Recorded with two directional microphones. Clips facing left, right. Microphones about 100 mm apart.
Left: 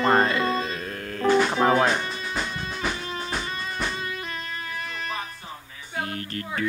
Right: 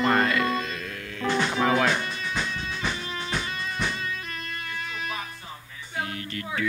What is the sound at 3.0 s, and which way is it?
Music, 40° left (ahead or behind).